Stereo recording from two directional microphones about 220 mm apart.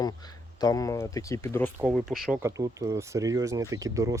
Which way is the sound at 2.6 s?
15° right (ahead or behind).